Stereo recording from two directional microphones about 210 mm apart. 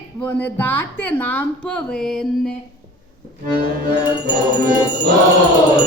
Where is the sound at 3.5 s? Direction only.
20° left (ahead or behind).